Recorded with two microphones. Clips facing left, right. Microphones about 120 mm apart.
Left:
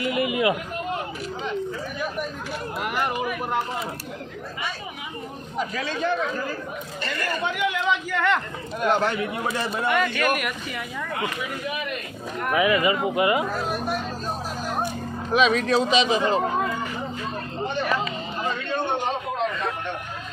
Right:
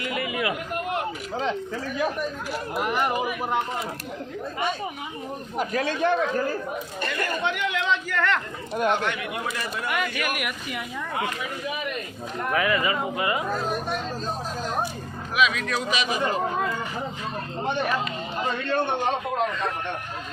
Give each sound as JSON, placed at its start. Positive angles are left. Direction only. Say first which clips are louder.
{"t": 0.0, "sound": "speech", "louder": "left 5 dB", "side_deg": 20}
{"t": 5.5, "sound": "a man's voice", "louder": "right 2 dB", "side_deg": -55}
{"t": 7.4, "sound": "speech", "louder": "left 3 dB", "side_deg": 5}
{"t": 8.9, "sound": "speech", "louder": "left 8 dB", "side_deg": 35}
{"t": 9.9, "sound": "speech", "louder": "left 5 dB", "side_deg": -10}
{"t": 12.5, "sound": "speech", "louder": "left 4 dB", "side_deg": 15}
{"t": 15.3, "sound": "speech", "louder": "left 4 dB", "side_deg": 30}